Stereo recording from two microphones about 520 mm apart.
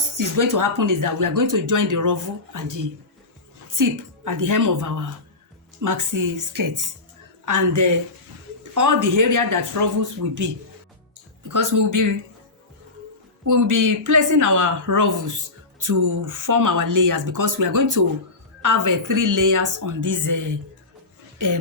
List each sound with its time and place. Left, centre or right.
0.2 s speech: right
13.5 s speech: right